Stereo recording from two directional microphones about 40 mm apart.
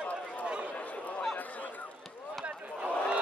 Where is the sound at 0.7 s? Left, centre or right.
Left.